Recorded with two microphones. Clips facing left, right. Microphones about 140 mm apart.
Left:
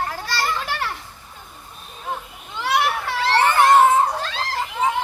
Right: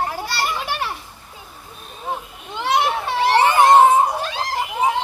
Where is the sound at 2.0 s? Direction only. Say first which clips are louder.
Right 2 dB; 20° right (ahead or behind).